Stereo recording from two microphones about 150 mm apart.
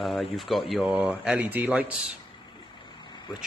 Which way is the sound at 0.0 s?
Centre (ahead or behind).